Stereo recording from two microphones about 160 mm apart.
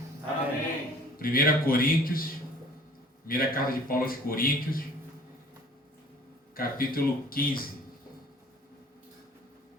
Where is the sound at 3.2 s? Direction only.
65° left (ahead or behind).